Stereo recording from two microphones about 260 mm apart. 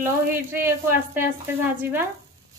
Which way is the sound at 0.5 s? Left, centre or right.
Centre.